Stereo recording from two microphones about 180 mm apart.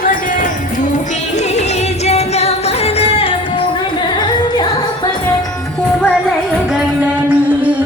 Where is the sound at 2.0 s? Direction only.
35° left (ahead or behind).